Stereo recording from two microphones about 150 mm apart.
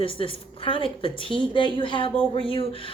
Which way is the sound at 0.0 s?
35° left (ahead or behind).